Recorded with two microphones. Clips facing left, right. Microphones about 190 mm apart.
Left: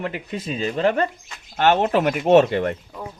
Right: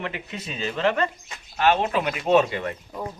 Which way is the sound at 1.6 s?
55° left (ahead or behind).